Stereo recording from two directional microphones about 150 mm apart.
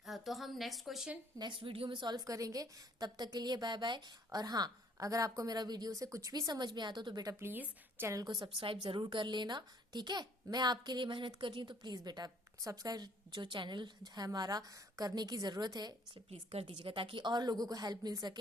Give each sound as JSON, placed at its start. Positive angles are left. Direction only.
{"t": 0.0, "sound": "a woman's voice", "side_deg": 0}
{"t": 1.4, "sound": "a woman's voice", "side_deg": -35}
{"t": 16.3, "sound": "a woman's voice", "side_deg": -40}